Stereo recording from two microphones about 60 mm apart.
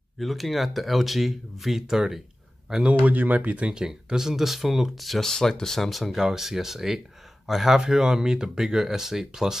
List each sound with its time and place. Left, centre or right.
0.2 s speech: centre
2.7 s speech: centre
3.1 s speech: right; by 9.6 s centre